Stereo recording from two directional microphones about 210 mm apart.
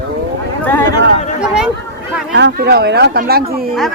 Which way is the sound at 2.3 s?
55° right (ahead or behind).